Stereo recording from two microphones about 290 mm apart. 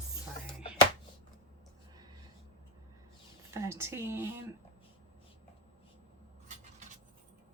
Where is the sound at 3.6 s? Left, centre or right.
Centre.